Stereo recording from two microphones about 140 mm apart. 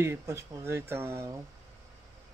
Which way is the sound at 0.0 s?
20° right (ahead or behind).